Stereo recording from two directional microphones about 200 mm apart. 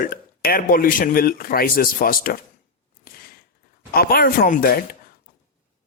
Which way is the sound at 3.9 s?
50° left (ahead or behind).